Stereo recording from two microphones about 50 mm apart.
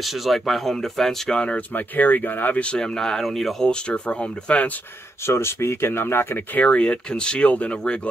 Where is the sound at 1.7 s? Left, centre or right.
Left.